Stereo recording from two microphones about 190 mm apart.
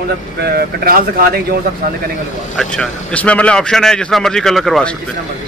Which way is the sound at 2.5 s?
5° left (ahead or behind).